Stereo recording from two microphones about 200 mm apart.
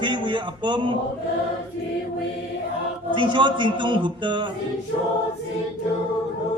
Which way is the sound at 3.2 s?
25° right (ahead or behind).